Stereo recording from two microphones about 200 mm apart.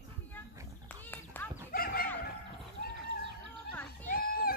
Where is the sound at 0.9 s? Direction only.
10° left (ahead or behind).